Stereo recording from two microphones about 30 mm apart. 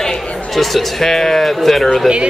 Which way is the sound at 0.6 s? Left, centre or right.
Centre.